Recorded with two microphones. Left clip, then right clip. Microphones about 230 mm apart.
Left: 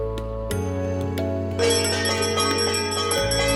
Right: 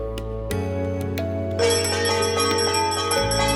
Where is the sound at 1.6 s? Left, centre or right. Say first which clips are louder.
Right 1 dB; centre.